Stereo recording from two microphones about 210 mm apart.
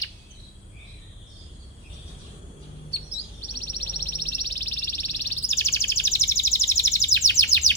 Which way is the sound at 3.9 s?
20° right (ahead or behind).